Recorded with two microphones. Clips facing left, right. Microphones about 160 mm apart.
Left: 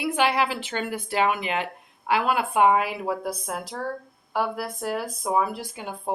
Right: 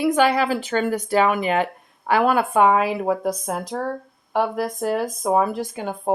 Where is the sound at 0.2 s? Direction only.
45° right (ahead or behind).